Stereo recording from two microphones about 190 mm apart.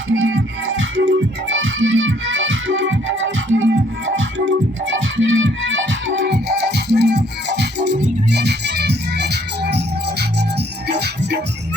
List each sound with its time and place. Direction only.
0.2 s music: 90° right; by 11.3 s 60° right (ahead or behind)